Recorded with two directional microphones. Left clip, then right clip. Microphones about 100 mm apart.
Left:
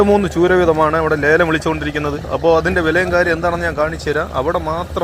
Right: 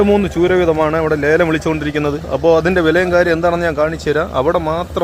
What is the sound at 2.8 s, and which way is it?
A man's voice, 55° right (ahead or behind).